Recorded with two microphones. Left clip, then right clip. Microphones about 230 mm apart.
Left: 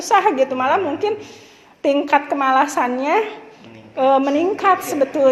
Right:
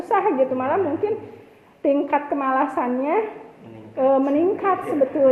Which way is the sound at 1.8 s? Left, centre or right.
Left.